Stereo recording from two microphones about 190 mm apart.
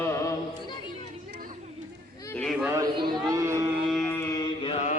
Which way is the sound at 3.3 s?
15° right (ahead or behind).